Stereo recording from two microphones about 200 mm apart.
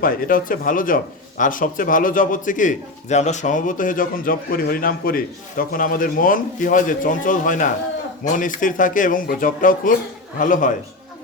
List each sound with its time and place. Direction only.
0.0 s a man's voice: 45° left (ahead or behind)